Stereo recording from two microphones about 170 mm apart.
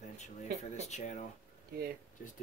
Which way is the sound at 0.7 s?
40° left (ahead or behind).